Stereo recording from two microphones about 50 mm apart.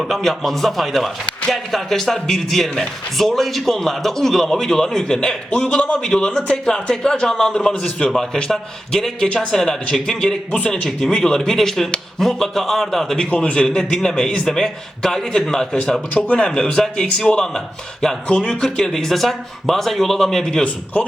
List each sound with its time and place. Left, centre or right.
0.1 s a man's voice: centre
13.1 s a man's voice: centre